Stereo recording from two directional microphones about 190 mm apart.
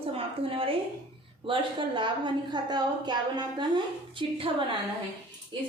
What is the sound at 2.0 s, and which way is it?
A woman's voice, 25° right (ahead or behind).